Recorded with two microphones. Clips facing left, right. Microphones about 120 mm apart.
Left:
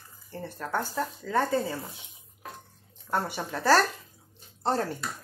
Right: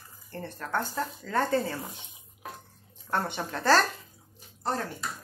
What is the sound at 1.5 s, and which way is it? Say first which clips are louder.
Speech: even; centre (ahead or behind).